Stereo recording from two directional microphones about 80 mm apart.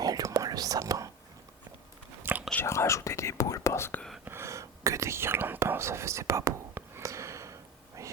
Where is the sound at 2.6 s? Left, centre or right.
Left.